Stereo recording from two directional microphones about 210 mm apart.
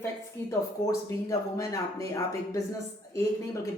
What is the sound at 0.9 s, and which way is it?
Speech, 15° left (ahead or behind).